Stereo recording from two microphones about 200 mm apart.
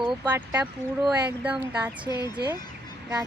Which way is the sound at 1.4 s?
5° right (ahead or behind).